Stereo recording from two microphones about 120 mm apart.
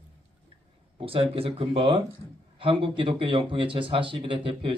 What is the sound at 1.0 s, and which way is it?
Speech, 50° right (ahead or behind).